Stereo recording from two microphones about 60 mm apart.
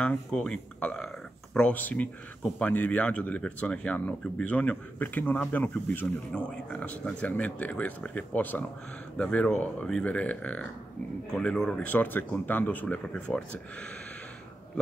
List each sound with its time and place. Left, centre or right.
0.3 s speech: centre
11.3 s speech: centre
11.8 s speech: left